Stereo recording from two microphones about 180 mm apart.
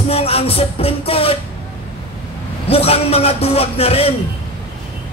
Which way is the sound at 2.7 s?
35° left (ahead or behind).